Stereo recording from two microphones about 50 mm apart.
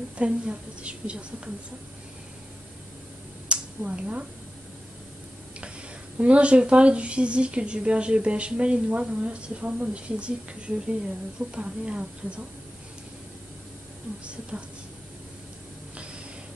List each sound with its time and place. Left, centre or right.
0.2 s a woman's voice: right
3.4 s a sound: right
6.1 s a woman's voice: right
14.2 s a woman's voice: right